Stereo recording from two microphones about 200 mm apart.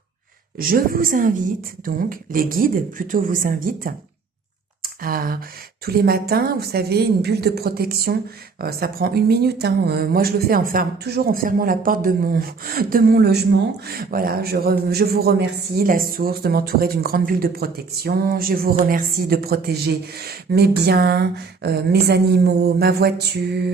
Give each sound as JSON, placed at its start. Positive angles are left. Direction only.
{"t": 0.6, "sound": "a man's voice", "side_deg": -45}
{"t": 4.8, "sound": "a sound", "side_deg": -45}
{"t": 5.8, "sound": "a man's voice", "side_deg": -50}